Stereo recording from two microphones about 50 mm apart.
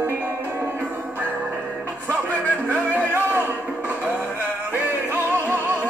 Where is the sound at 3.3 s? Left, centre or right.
Right.